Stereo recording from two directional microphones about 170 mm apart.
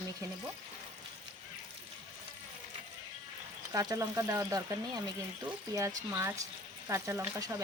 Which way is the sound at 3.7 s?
20° right (ahead or behind).